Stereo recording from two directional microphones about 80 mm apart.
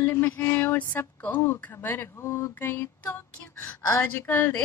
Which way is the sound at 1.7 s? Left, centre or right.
Left.